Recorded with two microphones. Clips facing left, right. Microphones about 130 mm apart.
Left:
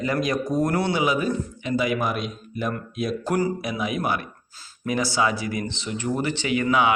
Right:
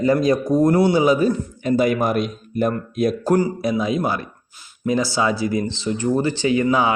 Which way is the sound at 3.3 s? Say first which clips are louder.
Right 4 dB; 30° right (ahead or behind).